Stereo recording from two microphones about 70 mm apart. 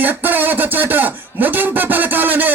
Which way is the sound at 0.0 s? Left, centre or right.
Right.